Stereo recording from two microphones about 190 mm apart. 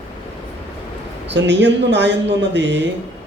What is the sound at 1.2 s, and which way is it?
A man's voice, 65° right (ahead or behind).